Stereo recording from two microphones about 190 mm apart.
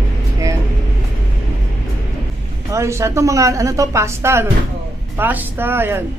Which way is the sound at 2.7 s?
15° right (ahead or behind).